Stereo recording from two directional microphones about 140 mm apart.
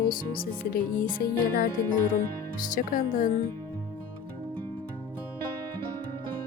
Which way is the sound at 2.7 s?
70° left (ahead or behind).